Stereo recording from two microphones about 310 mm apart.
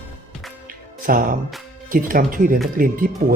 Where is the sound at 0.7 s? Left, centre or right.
Right.